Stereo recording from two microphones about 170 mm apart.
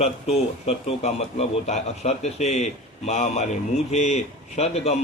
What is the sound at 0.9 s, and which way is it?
A man's voice, 40° left (ahead or behind).